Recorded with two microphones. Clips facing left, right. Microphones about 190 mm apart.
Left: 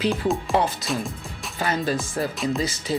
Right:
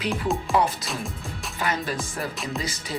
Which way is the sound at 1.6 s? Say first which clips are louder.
Left 3 dB; 30° left (ahead or behind).